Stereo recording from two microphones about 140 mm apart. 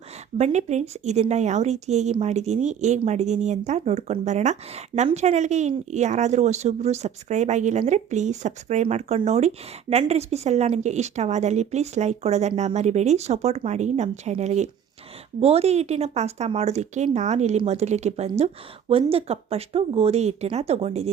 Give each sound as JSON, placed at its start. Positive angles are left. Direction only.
{"t": 0.3, "sound": "a woman's voice", "side_deg": -55}